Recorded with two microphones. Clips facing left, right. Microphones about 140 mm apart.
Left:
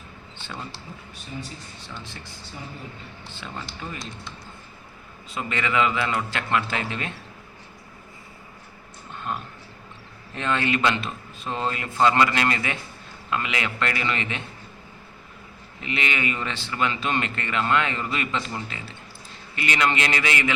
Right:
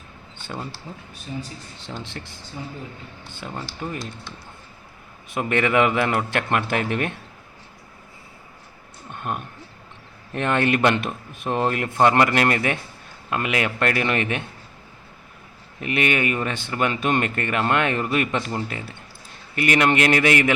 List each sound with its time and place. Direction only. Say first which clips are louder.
3.8 s speech: right 5 dB; 55° right (ahead or behind)
5.3 s speech: right 6 dB; 60° right (ahead or behind)
9.1 s a sound: right 2 dB; 55° right (ahead or behind)
10.3 s speech: right 4 dB; 55° right (ahead or behind)
15.8 s speech: right 5 dB; 55° right (ahead or behind)